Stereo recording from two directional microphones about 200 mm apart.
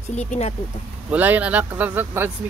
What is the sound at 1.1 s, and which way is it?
Speech, 10° right (ahead or behind).